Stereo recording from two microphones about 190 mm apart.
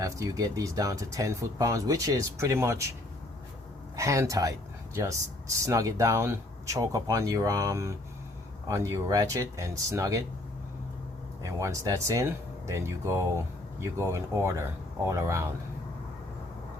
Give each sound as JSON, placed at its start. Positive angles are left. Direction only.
{"t": 0.0, "sound": "speech", "side_deg": -20}
{"t": 3.9, "sound": "speech", "side_deg": -15}
{"t": 11.4, "sound": "speech", "side_deg": -15}